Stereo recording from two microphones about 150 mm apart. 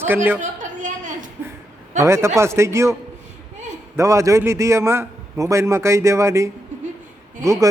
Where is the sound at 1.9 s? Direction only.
20° right (ahead or behind).